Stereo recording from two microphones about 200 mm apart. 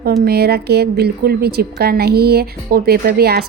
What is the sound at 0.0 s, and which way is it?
A woman's voice, 50° right (ahead or behind).